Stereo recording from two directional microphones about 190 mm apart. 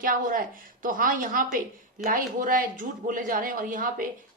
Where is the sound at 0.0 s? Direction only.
45° right (ahead or behind).